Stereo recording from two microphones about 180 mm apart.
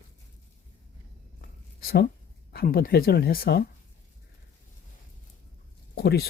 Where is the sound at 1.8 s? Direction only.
60° left (ahead or behind).